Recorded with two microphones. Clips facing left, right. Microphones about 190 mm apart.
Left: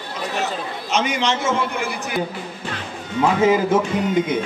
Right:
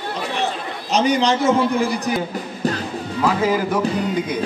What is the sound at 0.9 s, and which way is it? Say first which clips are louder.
A man's voice: right 4 dB; 35° right (ahead or behind).